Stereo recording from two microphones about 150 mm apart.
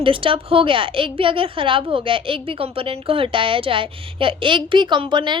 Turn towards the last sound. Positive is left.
turn(degrees=-30)  # may be behind; listen again after turning